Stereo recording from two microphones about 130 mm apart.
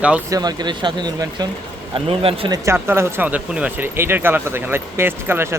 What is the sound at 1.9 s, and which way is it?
Speech, 45° right (ahead or behind).